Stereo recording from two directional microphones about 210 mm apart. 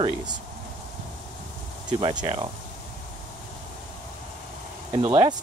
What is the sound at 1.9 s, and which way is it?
Speech, 20° right (ahead or behind).